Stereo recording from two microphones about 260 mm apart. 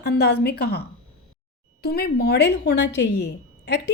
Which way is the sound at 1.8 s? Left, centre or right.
Left.